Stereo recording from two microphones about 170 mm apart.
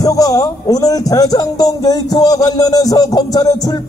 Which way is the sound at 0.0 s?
20° left (ahead or behind).